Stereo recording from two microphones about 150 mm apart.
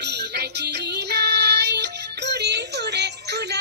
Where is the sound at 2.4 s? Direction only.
90° right.